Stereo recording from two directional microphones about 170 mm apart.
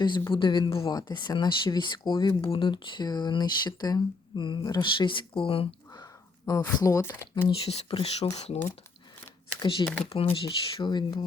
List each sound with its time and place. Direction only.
0.3 s speech: 30° left (ahead or behind); by 7.4 s 15° left (ahead or behind)
7.4 s speech: 35° left (ahead or behind)
9.6 s speech: 30° left (ahead or behind)